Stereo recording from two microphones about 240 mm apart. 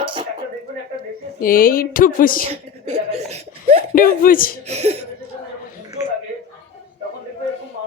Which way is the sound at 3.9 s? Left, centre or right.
Left.